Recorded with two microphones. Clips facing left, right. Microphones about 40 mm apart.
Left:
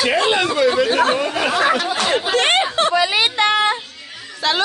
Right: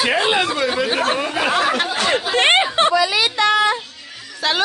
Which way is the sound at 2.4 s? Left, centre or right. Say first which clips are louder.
Right 3 dB; right.